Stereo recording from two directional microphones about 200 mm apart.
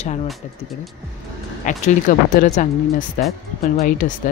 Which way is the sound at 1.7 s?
40° left (ahead or behind).